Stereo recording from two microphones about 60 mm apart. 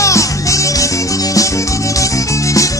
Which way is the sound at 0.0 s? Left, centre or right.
Left.